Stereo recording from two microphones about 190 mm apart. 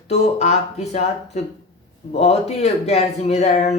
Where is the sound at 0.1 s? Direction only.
35° left (ahead or behind).